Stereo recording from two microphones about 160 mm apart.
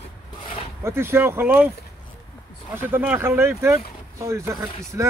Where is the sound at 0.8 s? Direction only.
15° right (ahead or behind).